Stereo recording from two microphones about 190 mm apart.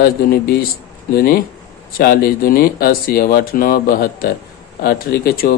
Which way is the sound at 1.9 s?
50° left (ahead or behind).